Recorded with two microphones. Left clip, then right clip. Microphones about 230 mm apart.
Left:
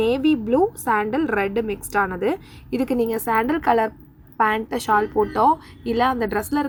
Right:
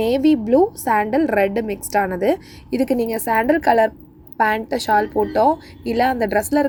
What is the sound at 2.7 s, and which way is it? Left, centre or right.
Speech, centre.